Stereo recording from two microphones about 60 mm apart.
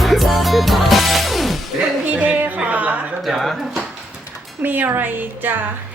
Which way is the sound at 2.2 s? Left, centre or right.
Right.